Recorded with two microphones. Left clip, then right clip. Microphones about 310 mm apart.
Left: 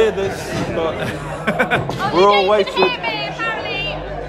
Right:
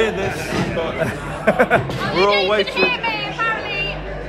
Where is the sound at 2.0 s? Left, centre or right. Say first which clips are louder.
Left 7 dB; centre.